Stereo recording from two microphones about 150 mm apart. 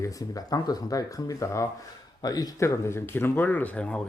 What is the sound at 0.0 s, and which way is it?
Speech, 20° left (ahead or behind).